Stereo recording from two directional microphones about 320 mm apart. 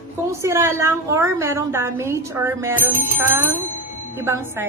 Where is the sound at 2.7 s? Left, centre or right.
Left.